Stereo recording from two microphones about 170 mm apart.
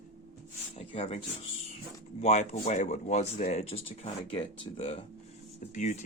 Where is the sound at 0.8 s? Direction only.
40° left (ahead or behind).